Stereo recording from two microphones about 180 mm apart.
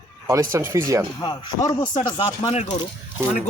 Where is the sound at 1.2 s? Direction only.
25° left (ahead or behind).